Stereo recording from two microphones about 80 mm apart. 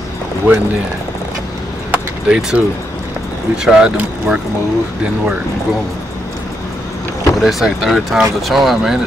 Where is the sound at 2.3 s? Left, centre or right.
Centre.